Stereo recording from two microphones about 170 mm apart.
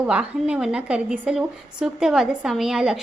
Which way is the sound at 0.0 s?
10° right (ahead or behind).